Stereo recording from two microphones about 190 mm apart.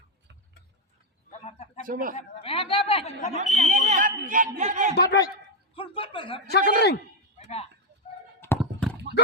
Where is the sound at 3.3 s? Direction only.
40° right (ahead or behind).